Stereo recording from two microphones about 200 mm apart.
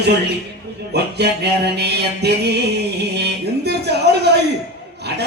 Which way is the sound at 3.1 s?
55° right (ahead or behind).